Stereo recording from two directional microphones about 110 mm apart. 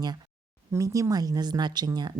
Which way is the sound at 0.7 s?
30° right (ahead or behind).